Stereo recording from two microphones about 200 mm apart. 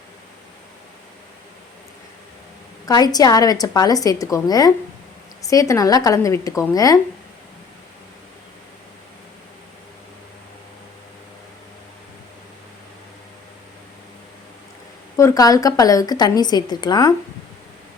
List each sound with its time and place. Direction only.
2.8 s a woman's voice: 20° left (ahead or behind)
15.1 s a woman's voice: 15° left (ahead or behind)